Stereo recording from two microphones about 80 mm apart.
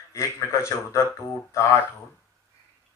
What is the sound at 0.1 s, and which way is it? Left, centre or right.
Speech, left.